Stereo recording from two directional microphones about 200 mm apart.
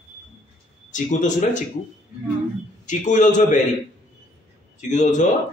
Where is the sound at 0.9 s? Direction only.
40° left (ahead or behind).